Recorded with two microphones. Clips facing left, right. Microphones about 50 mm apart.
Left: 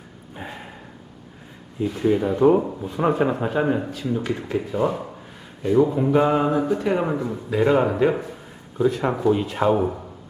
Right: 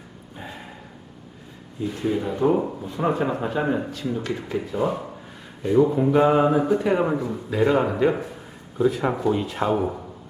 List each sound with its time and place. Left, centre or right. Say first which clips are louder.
0.4 s dog: left 2 dB; centre
1.8 s speech: left 4 dB; centre
3.1 s speech: left 2 dB; centre